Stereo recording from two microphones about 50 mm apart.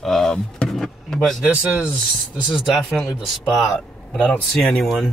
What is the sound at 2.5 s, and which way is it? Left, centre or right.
Speech, centre.